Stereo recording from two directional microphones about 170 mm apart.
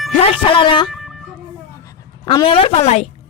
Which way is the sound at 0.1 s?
35° left (ahead or behind).